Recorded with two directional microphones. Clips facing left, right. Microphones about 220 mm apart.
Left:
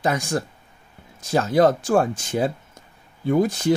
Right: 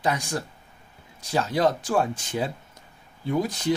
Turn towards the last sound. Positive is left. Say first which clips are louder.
# left 6 dB
turn(degrees=50)  # may be behind; listen again after turning